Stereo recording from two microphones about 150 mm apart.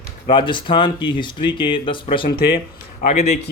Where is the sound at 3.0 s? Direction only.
45° left (ahead or behind).